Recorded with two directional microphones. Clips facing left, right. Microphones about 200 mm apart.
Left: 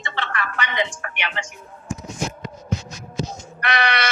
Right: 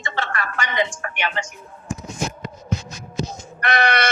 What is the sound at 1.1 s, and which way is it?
Synthetic singing, 45° right (ahead or behind).